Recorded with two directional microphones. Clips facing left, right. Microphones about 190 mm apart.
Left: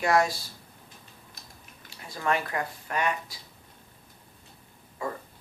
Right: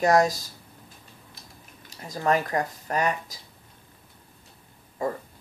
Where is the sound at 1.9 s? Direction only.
40° right (ahead or behind).